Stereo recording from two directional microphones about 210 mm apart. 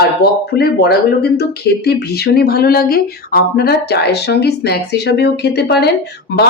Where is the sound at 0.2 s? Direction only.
50° left (ahead or behind).